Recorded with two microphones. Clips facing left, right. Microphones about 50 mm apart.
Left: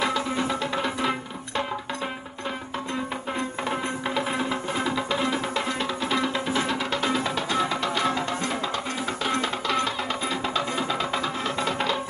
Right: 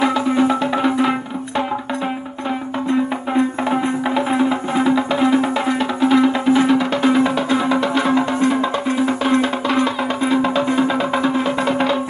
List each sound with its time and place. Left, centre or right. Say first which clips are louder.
0.0 s music: right 9 dB; right
4.1 s music: right 9 dB; right